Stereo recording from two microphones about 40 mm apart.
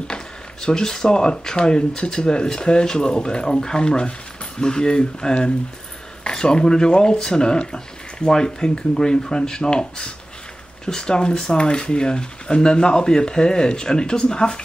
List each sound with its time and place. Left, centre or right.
0.1 s speech: left